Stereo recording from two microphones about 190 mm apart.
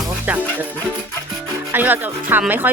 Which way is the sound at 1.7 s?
10° right (ahead or behind).